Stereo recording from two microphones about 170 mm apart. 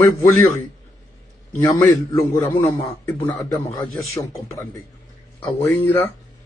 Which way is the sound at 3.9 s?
Centre (ahead or behind).